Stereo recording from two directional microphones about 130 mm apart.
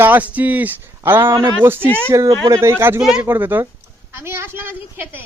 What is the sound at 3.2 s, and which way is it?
Speech, 15° right (ahead or behind).